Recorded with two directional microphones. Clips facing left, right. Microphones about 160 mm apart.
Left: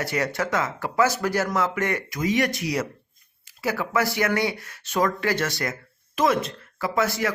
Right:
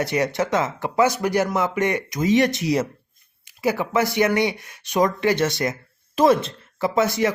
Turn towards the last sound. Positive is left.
turn(degrees=-20)  # may be behind; listen again after turning